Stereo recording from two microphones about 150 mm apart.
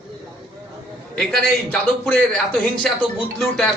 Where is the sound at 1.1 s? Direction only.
5° left (ahead or behind).